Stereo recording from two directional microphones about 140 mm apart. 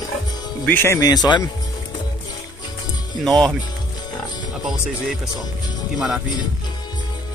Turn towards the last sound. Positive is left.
turn(degrees=-5)  # may be behind; listen again after turning